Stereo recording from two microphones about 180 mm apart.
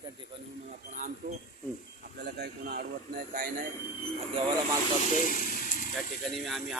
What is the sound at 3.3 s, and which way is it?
Speech, 50° right (ahead or behind).